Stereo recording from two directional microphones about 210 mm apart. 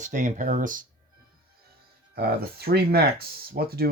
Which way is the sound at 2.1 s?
50° right (ahead or behind).